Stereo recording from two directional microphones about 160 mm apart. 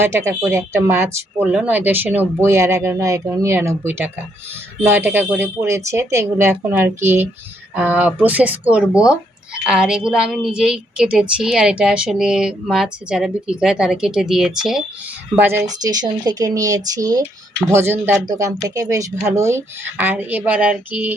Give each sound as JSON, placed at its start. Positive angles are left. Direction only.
{"t": 0.0, "sound": "a woman's voice", "side_deg": -15}
{"t": 15.8, "sound": "speech", "side_deg": -25}